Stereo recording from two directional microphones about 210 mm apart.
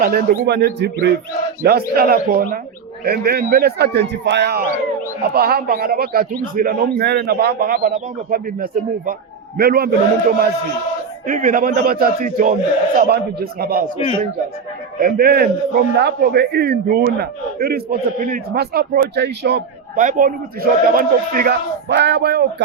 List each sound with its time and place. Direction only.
0.0 s a man's voice: 45° right (ahead or behind)
14.9 s a man's voice: 45° right (ahead or behind)
20.0 s a man's voice: 40° right (ahead or behind)